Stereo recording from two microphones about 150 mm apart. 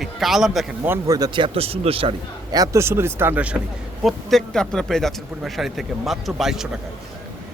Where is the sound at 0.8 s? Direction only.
20° right (ahead or behind).